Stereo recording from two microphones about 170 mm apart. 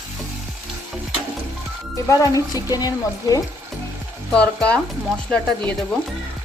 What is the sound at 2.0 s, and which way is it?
Speech, 20° left (ahead or behind).